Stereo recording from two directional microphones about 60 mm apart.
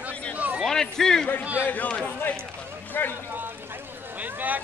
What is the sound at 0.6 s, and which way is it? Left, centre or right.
Speech, centre.